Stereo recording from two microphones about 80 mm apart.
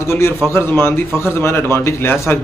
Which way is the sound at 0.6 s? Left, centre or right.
Left.